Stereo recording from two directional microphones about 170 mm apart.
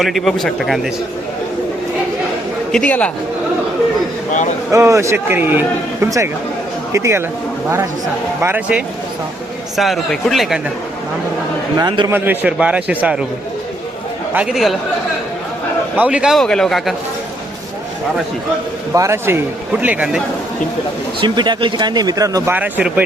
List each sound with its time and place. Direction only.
0.0 s speech: centre (ahead or behind)
2.7 s speech: 5° left (ahead or behind)
4.7 s a man's voice: 15° right (ahead or behind)
8.4 s a man's voice: 10° right (ahead or behind)
9.7 s speech: centre (ahead or behind)
11.8 s speech: 25° right (ahead or behind)
12.1 s a man's voice: 10° right (ahead or behind)
14.3 s speech: 5° right (ahead or behind)
16.0 s speech: 5° right (ahead or behind)
18.9 s a man's voice: 15° right (ahead or behind)
21.2 s speech: 25° right (ahead or behind)
22.5 s a man's voice: 10° right (ahead or behind)